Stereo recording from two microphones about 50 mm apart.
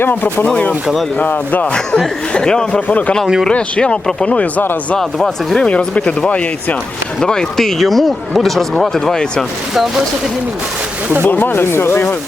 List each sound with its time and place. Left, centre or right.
0.4 s speech: left
2.3 s speech: centre
4.9 s speech: centre
5.6 s speech: left
7.2 s speech: centre
11.3 s speech: left